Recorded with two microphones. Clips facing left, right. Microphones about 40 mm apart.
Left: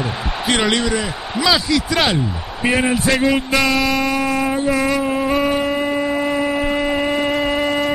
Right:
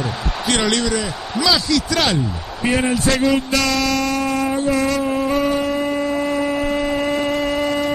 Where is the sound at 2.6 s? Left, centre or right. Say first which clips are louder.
Left 1 dB; centre.